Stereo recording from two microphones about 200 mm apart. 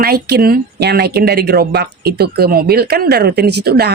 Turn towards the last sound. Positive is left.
turn(degrees=-55)  # may be behind; listen again after turning